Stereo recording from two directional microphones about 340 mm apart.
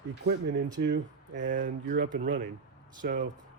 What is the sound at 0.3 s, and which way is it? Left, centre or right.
Speech, right.